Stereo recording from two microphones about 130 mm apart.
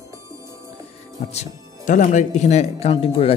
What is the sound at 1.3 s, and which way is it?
Speech, 65° left (ahead or behind).